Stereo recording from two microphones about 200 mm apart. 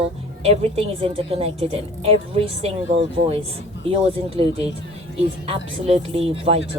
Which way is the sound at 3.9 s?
30° right (ahead or behind).